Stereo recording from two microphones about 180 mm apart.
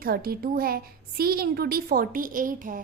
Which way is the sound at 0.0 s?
55° right (ahead or behind).